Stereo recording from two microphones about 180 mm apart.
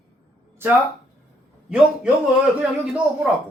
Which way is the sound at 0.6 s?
15° right (ahead or behind).